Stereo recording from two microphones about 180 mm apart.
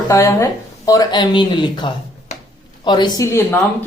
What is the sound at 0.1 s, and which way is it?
A woman's voice, 15° left (ahead or behind).